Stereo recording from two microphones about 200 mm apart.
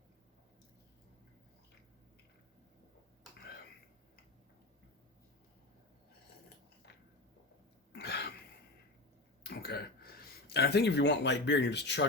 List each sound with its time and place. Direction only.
6.9 s a sound: 60° left (ahead or behind)
7.9 s throat clearing: 55° left (ahead or behind)
9.4 s speech: 50° left (ahead or behind)